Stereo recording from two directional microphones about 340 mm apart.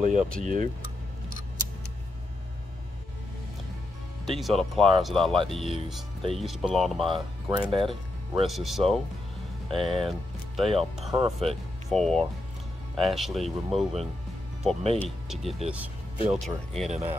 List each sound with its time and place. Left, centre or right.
0.0 s speech: right
4.3 s speech: centre
7.1 s speech: centre
8.5 s speech: centre
16.9 s speech: centre